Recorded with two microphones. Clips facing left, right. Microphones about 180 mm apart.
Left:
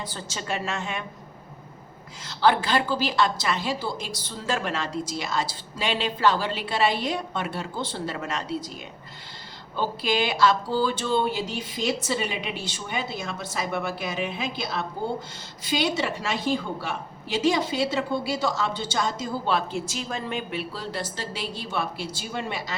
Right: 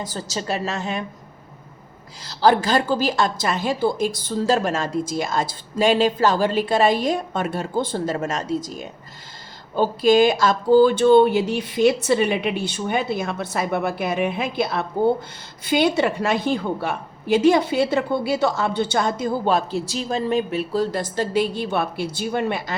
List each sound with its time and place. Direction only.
0.0 s a woman's voice: 40° right (ahead or behind)
2.2 s a woman's voice: 40° right (ahead or behind); by 22.7 s 60° right (ahead or behind)